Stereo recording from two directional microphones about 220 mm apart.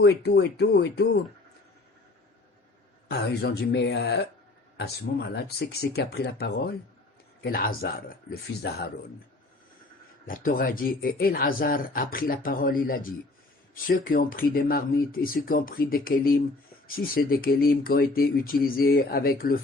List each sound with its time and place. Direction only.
0.0 s speech: 50° left (ahead or behind)
3.1 s speech: 45° left (ahead or behind)
10.2 s speech: 40° left (ahead or behind)